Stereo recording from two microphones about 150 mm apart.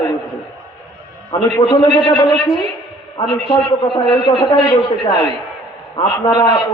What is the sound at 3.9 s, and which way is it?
A man's voice, 30° left (ahead or behind).